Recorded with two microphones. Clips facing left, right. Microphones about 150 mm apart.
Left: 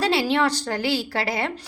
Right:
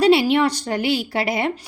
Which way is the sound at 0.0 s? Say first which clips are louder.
Right 6 dB; 15° right (ahead or behind).